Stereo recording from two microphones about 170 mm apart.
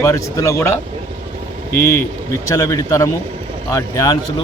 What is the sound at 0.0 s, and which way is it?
Speech, 15° left (ahead or behind).